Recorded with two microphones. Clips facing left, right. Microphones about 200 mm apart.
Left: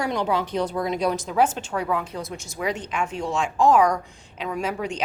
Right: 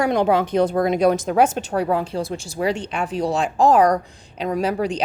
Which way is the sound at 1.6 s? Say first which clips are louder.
Right 5 dB; 40° right (ahead or behind).